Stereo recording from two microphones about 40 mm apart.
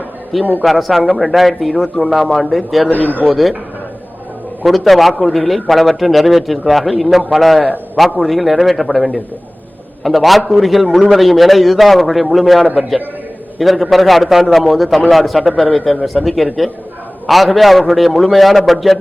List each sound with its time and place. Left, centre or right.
0.6 s a man's voice: centre
2.9 s speech: left
4.6 s a man's voice: centre